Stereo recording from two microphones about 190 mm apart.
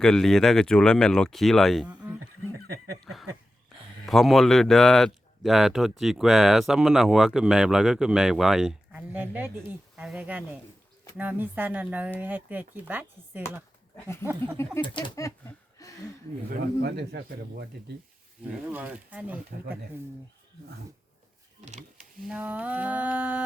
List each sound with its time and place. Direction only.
0.0 s speech: 5° left (ahead or behind)
3.0 s a sound: centre (ahead or behind)
4.0 s speech: centre (ahead or behind)
13.9 s speech: 15° left (ahead or behind)
14.8 s speech: 25° left (ahead or behind)
15.8 s a sound: 20° left (ahead or behind)
16.5 s speech: 60° right (ahead or behind)
18.7 s speech: 10° right (ahead or behind)
21.6 s speech: 35° right (ahead or behind)
22.3 s speech: 5° right (ahead or behind)